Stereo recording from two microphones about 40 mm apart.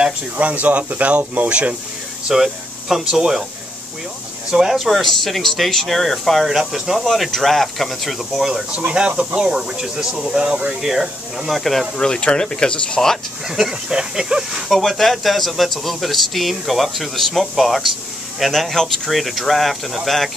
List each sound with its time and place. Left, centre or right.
0.4 s speech: right
1.5 s speech: right
2.2 s speech: centre
4.5 s speech: centre
4.7 s speech: centre
6.7 s speech: centre
7.1 s speech: centre
8.7 s speech: right
10.8 s speech: centre
12.0 s speech: centre
13.5 s speech: centre
14.7 s speech: centre